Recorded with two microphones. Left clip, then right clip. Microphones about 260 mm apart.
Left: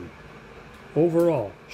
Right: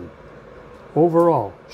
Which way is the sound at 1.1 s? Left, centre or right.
Centre.